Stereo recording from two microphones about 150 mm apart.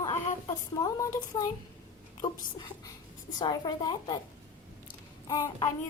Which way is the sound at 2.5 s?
30° left (ahead or behind).